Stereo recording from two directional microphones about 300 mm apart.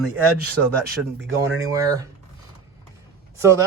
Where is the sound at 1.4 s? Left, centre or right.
Centre.